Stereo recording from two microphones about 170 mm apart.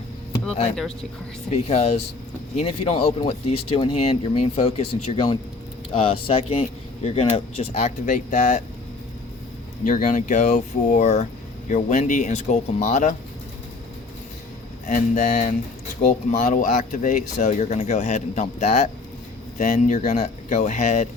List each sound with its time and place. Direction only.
1.5 s speech: 40° left (ahead or behind)
9.8 s speech: 50° left (ahead or behind)
14.8 s speech: 50° left (ahead or behind)